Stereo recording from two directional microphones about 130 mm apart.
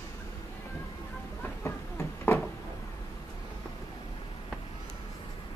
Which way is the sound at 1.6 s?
20° left (ahead or behind).